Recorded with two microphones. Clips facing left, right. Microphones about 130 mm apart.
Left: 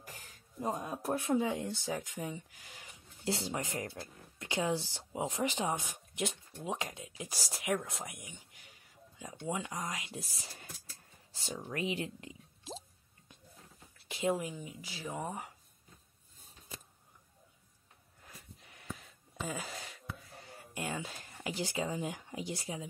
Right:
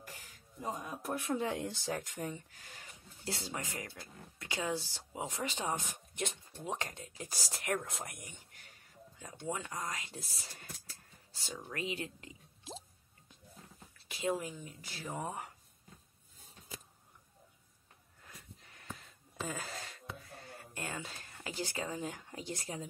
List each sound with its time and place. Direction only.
0.6 s speech: 35° left (ahead or behind)
1.4 s speech: centre (ahead or behind)
3.3 s speech: 20° left (ahead or behind); by 8.7 s 5° left (ahead or behind)
9.5 s speech: 15° left (ahead or behind)
14.0 s speech: 25° left (ahead or behind)
14.6 s speech: 10° left (ahead or behind)
15.0 s speech: centre (ahead or behind)
19.3 s a sound: centre (ahead or behind)
20.7 s speech: 15° left (ahead or behind)